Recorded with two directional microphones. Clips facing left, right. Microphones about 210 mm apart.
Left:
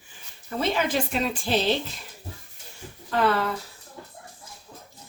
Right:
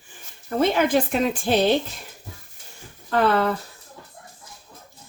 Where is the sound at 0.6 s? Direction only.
50° right (ahead or behind).